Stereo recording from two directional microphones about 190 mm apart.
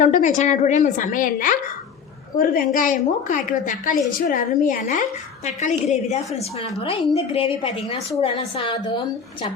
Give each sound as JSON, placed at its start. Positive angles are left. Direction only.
{"t": 0.0, "sound": "a woman's voice", "side_deg": 40}